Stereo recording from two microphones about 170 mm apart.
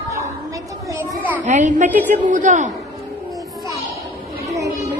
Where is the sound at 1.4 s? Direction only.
45° right (ahead or behind).